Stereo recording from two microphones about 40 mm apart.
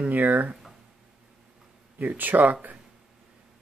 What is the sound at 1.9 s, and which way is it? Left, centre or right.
Speech, right.